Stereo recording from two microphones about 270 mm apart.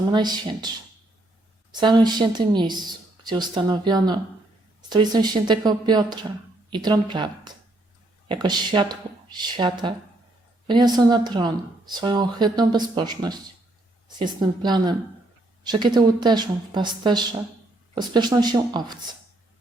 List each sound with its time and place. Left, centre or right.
0.1 s speech: centre
1.7 s speech: centre